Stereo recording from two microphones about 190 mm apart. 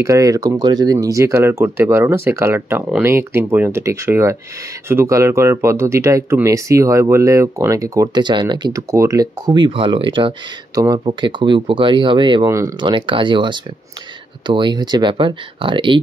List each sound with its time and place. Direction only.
0.0 s speech: 15° right (ahead or behind)